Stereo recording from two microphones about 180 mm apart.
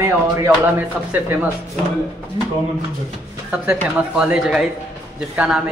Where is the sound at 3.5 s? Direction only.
5° right (ahead or behind).